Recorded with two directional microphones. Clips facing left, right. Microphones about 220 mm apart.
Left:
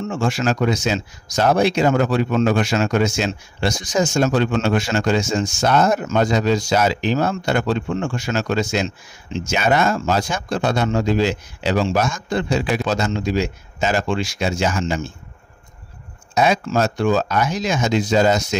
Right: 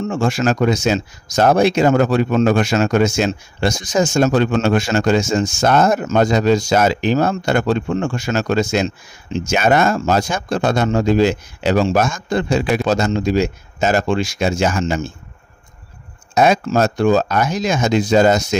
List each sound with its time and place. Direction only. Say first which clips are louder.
0.0 s speech: right 3 dB; 45° right (ahead or behind)
16.3 s speech: right 3 dB; 45° right (ahead or behind)